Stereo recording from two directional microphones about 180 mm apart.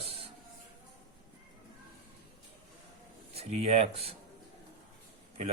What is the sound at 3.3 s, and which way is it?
Speech, 35° right (ahead or behind).